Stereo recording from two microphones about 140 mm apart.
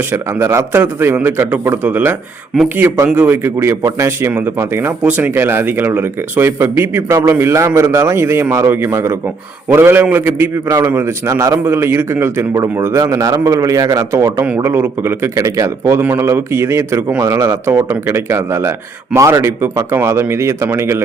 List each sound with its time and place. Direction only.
0.1 s a man's voice: 20° right (ahead or behind)